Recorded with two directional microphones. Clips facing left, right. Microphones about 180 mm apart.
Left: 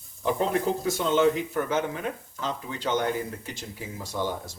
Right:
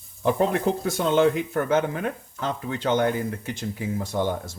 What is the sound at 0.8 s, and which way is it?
Speech, 55° right (ahead or behind).